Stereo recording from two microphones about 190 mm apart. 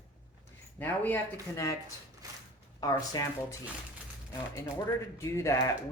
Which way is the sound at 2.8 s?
20° left (ahead or behind).